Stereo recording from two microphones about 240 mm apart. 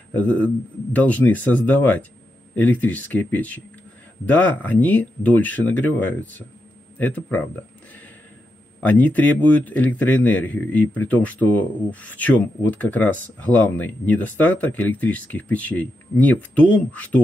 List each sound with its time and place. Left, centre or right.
0.1 s speech: centre
8.8 s speech: centre